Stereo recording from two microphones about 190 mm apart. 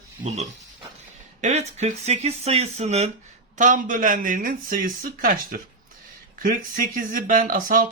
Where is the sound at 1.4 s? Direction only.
35° right (ahead or behind).